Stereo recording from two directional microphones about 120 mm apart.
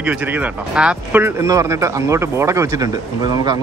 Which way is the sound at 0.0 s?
10° right (ahead or behind).